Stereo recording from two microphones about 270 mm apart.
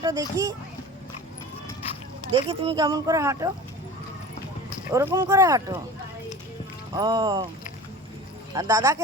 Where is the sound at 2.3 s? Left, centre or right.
Centre.